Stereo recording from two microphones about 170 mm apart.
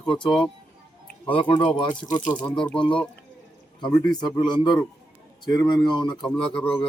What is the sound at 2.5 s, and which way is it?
Speech, 5° left (ahead or behind).